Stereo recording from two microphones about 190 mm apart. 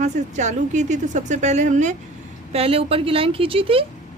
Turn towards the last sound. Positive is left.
turn(degrees=-30)  # may be behind; listen again after turning